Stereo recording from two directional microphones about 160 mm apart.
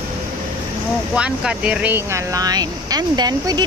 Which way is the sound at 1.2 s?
5° right (ahead or behind).